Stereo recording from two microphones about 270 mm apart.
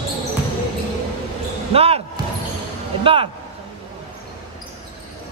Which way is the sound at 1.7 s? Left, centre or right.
Right.